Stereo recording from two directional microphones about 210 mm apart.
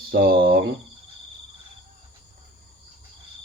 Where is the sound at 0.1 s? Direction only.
45° right (ahead or behind).